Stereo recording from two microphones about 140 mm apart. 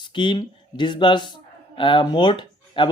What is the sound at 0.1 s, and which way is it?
Speech, 35° left (ahead or behind).